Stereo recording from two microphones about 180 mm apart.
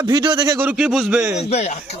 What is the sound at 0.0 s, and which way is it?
Speech, 25° right (ahead or behind).